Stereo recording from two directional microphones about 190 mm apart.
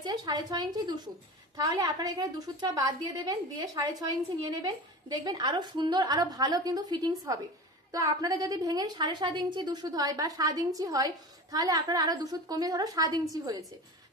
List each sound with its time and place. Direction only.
0.0 s a woman's voice: 20° right (ahead or behind)